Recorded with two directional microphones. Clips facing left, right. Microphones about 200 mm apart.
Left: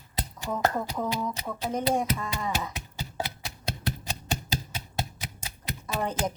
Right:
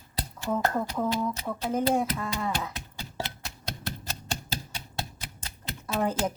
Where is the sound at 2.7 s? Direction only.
15° left (ahead or behind).